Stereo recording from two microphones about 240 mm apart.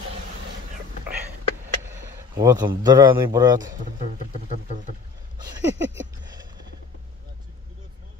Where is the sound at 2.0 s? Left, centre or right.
Centre.